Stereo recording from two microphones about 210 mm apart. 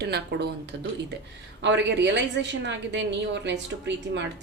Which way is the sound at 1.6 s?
60° right (ahead or behind).